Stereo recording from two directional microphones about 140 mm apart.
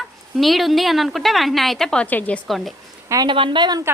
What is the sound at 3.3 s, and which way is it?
Speech, 35° right (ahead or behind).